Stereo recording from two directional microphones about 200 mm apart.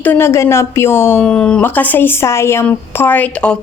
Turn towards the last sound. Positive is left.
turn(degrees=5)  # may be behind; listen again after turning